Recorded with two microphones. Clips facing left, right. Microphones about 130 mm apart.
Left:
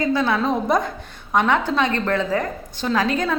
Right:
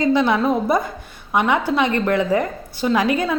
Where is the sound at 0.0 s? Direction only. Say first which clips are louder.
Right 3 dB; 20° right (ahead or behind).